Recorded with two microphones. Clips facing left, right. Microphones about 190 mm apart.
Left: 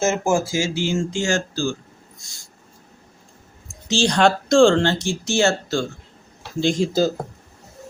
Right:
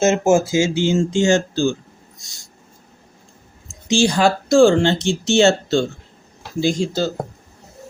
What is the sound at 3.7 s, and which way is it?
Speech, 15° right (ahead or behind).